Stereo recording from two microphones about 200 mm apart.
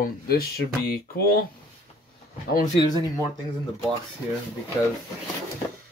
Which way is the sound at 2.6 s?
20° left (ahead or behind).